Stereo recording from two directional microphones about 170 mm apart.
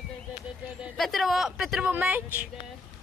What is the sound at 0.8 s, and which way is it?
Speech, centre (ahead or behind).